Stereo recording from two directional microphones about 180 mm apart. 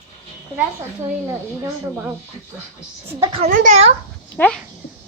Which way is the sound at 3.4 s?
45° right (ahead or behind).